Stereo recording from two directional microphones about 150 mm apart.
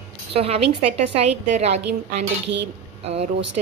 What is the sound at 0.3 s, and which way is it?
A woman's voice, 40° right (ahead or behind).